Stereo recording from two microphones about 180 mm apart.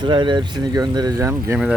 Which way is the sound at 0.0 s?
25° right (ahead or behind).